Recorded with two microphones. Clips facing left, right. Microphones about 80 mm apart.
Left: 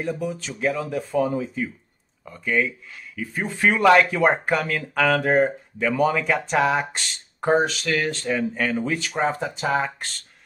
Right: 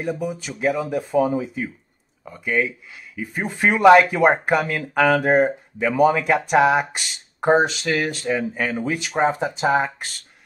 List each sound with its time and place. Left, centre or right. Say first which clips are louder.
0.0 s speech: right 1 dB; centre